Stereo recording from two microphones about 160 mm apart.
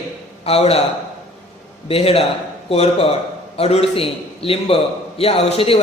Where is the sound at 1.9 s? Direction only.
35° left (ahead or behind).